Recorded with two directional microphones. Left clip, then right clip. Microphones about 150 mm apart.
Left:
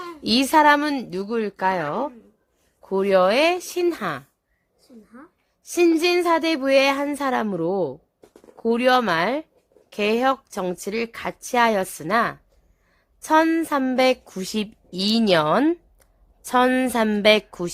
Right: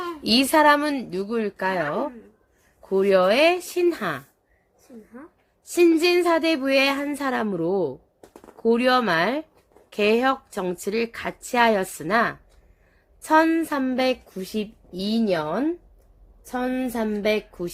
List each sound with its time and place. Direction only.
0.2 s a woman's voice: 30° left (ahead or behind)
5.7 s a woman's voice: 25° left (ahead or behind); by 17.7 s 50° left (ahead or behind)